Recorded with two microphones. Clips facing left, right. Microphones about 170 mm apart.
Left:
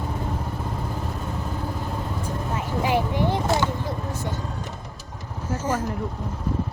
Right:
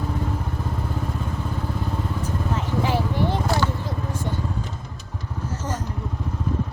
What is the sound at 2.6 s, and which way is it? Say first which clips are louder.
Vehicle: left 2 dB; 15° left (ahead or behind).